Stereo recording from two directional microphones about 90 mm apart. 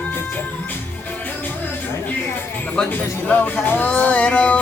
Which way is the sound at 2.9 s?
20° left (ahead or behind).